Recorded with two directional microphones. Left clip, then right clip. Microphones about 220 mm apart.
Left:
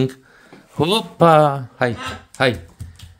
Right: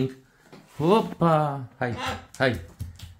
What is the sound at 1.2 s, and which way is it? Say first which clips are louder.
Speech: left 11 dB; 45° left (ahead or behind).